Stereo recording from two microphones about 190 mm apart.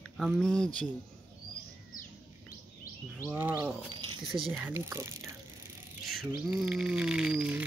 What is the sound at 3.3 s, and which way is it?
Speech, 10° right (ahead or behind).